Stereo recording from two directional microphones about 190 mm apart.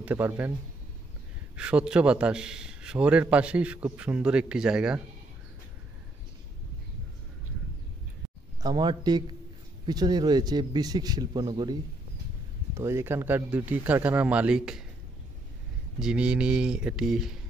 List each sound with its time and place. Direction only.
0.0 s a man's voice: 10° right (ahead or behind)
1.6 s a man's voice: 5° right (ahead or behind)
8.6 s a man's voice: 20° right (ahead or behind); by 14.9 s 5° right (ahead or behind)
16.0 s a man's voice: 5° right (ahead or behind)